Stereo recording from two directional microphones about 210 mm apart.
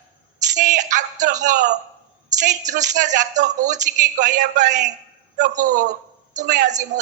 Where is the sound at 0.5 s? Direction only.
35° right (ahead or behind).